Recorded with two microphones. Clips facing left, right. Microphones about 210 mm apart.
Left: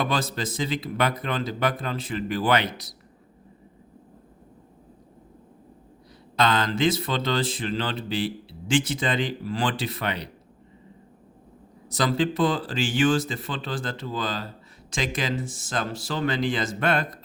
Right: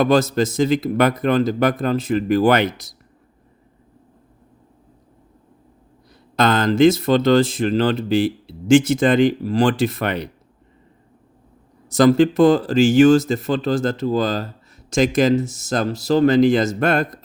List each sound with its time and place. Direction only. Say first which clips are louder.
0.0 s speech: right 11 dB; 45° right (ahead or behind)
6.3 s speech: right 7 dB; 45° right (ahead or behind)
11.9 s speech: right 11 dB; 50° right (ahead or behind)